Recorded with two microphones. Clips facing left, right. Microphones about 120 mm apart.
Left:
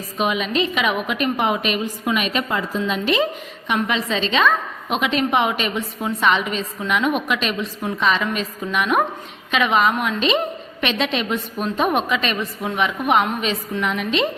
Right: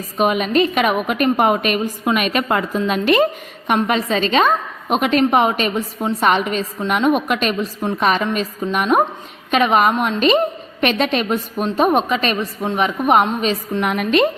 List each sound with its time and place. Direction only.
0.2 s a woman's voice: 45° right (ahead or behind)
13.8 s a woman's voice: 50° right (ahead or behind)